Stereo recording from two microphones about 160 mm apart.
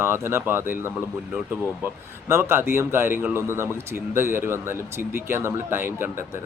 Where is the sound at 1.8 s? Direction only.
15° right (ahead or behind).